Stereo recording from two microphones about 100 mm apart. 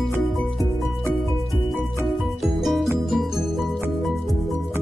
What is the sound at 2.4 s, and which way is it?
Music, centre (ahead or behind).